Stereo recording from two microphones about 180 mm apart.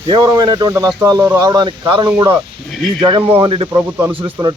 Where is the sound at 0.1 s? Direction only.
20° right (ahead or behind).